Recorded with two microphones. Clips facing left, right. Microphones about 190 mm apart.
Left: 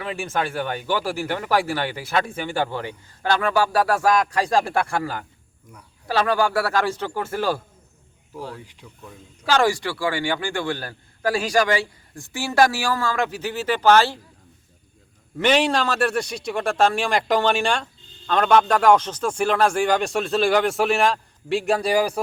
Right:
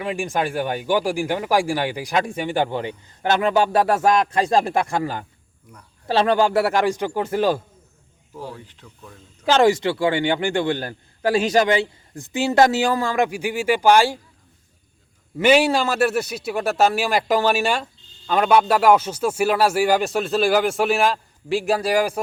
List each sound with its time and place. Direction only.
0.0 s a man's voice: 15° right (ahead or behind)
8.5 s speech: 10° left (ahead or behind)
9.5 s a man's voice: 20° right (ahead or behind)
15.4 s a man's voice: 5° right (ahead or behind)